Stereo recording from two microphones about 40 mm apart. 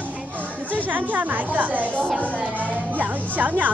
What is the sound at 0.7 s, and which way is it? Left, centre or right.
Speech, right.